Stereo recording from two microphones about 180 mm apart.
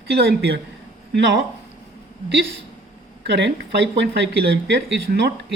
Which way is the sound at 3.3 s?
75° right (ahead or behind).